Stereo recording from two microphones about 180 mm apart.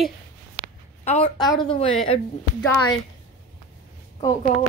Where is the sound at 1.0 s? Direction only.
40° left (ahead or behind).